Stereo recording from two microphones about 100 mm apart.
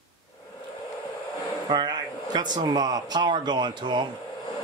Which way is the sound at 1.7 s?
45° right (ahead or behind).